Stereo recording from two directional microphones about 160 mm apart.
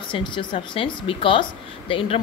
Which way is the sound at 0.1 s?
30° left (ahead or behind).